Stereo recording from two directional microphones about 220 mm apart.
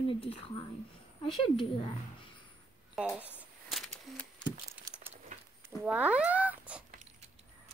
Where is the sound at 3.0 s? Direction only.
5° right (ahead or behind).